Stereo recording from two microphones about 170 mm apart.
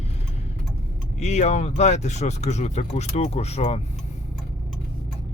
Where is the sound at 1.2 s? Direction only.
40° left (ahead or behind).